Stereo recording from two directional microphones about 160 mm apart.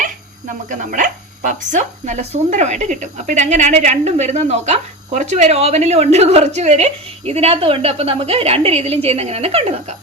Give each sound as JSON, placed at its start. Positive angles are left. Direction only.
{"t": 0.7, "sound": "speech", "side_deg": -50}